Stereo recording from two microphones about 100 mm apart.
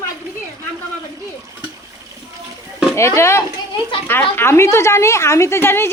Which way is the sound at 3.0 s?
30° left (ahead or behind).